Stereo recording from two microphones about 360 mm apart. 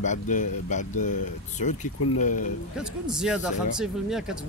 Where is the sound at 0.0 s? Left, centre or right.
Left.